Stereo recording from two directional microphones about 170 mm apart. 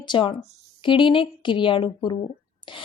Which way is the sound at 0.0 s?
25° left (ahead or behind).